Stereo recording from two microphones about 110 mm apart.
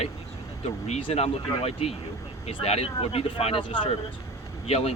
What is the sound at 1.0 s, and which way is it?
Speech, 65° left (ahead or behind).